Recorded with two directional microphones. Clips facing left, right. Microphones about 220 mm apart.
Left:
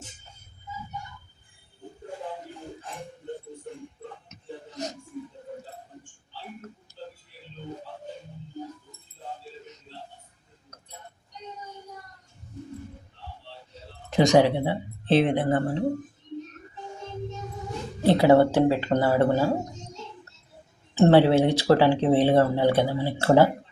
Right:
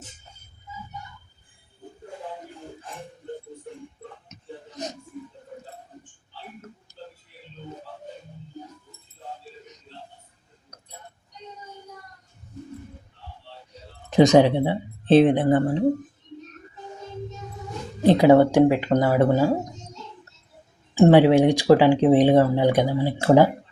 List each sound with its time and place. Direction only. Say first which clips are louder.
4.3 s a sound: left 1 dB; 20° right (ahead or behind)
14.1 s speech: right 4 dB; 20° right (ahead or behind)
18.0 s speech: right 3 dB; 15° right (ahead or behind)
20.9 s speech: right 3 dB; 15° right (ahead or behind)